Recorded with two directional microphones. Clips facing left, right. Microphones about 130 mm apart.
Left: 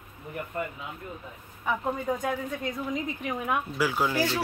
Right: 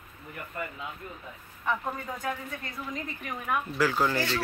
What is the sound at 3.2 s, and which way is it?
Speech, 15° left (ahead or behind).